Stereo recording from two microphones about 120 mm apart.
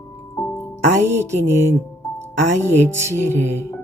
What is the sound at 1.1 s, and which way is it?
Speech, 20° right (ahead or behind).